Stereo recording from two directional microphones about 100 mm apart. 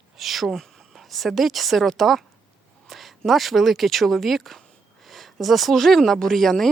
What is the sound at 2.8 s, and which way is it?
Speech, centre (ahead or behind).